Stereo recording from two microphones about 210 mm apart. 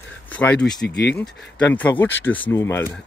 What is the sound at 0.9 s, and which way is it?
Speech, 55° left (ahead or behind).